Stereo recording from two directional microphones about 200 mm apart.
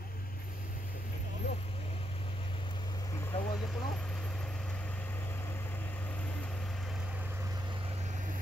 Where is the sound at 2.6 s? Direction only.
20° left (ahead or behind).